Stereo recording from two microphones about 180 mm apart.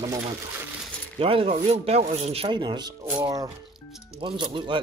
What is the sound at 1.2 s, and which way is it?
Speech, 30° right (ahead or behind).